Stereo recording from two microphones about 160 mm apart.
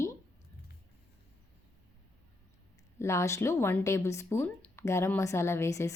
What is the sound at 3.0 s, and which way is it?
Speech, 15° left (ahead or behind).